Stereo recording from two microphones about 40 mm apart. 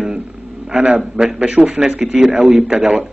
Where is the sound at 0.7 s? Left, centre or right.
Right.